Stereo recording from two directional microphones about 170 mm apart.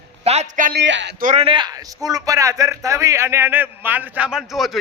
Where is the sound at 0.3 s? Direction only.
45° right (ahead or behind).